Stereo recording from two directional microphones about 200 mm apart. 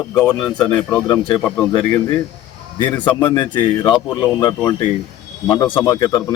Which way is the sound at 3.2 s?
25° left (ahead or behind).